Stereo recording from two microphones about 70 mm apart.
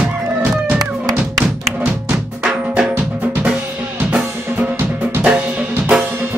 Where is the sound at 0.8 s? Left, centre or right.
Right.